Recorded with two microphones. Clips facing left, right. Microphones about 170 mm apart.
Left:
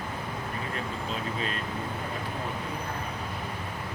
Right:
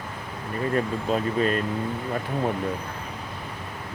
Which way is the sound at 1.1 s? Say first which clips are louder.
Right 12 dB; 50° right (ahead or behind).